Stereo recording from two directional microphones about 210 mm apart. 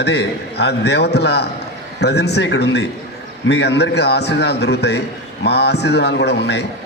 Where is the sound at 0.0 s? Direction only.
55° left (ahead or behind).